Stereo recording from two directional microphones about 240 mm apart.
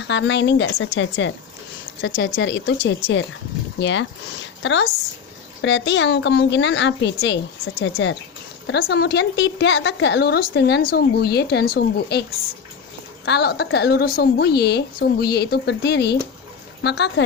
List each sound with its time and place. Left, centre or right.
0.0 s a woman's voice: left
13.2 s a woman's voice: left